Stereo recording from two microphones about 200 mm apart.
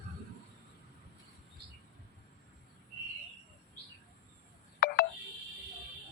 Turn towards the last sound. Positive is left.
turn(degrees=50)  # may be behind; listen again after turning